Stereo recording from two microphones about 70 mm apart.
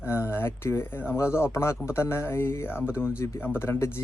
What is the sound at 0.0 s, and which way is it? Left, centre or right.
Speech, left.